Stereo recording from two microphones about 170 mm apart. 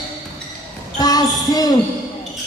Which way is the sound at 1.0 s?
20° left (ahead or behind).